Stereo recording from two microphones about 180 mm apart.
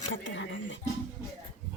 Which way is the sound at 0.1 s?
90° left.